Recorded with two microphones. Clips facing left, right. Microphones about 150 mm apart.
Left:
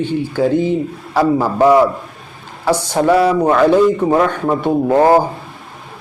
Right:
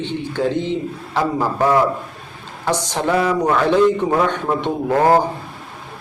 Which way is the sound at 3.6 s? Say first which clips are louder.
Left 3 dB; 10° left (ahead or behind).